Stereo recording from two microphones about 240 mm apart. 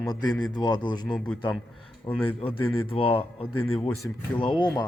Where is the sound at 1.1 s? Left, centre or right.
Centre.